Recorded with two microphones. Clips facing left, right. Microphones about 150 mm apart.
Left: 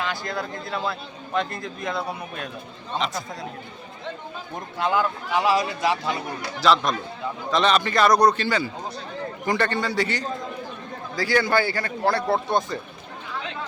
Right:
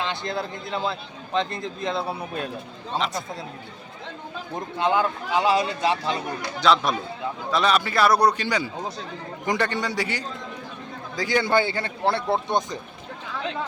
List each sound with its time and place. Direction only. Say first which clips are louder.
0.0 s a man's voice: right 1 dB; 25° right (ahead or behind)
4.8 s a man's voice: right 1 dB; 25° right (ahead or behind)
6.6 s a man's voice: even; centre (ahead or behind); by 12.8 s 20° right (ahead or behind)